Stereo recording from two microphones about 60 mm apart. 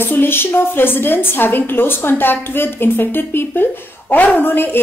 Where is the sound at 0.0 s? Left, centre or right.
Left.